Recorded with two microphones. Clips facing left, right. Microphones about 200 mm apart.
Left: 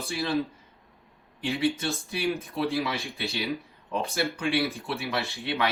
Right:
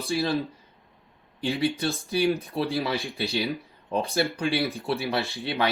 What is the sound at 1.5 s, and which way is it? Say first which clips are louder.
Speech: right 1 dB; 35° right (ahead or behind).